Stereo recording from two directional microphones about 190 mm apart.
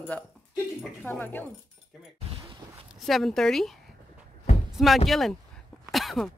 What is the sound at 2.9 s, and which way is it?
Speech, centre (ahead or behind).